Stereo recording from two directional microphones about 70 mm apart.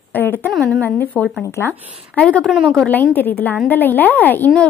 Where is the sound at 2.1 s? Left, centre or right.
Centre.